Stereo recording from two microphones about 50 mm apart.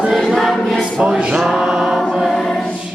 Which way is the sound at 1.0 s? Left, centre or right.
Centre.